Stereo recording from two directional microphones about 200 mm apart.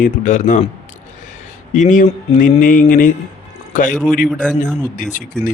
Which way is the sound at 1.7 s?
40° left (ahead or behind).